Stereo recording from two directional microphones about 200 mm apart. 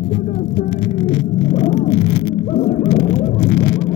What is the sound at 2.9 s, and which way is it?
Vehicle, 55° left (ahead or behind).